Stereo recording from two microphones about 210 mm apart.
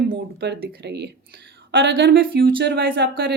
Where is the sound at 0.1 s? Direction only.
50° right (ahead or behind).